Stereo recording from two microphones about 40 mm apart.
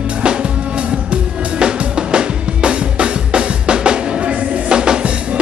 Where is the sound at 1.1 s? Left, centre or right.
Right.